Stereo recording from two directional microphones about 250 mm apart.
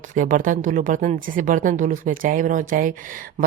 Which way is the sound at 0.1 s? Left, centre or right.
Right.